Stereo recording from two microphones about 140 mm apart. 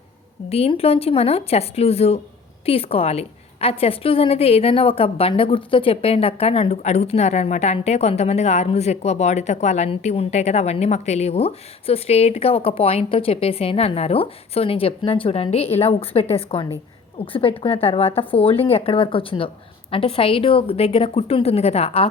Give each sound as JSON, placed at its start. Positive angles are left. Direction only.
{"t": 0.5, "sound": "a woman's voice", "side_deg": 45}